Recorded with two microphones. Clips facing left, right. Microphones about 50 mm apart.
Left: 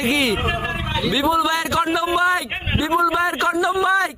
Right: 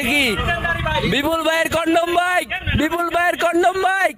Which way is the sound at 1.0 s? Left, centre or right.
Right.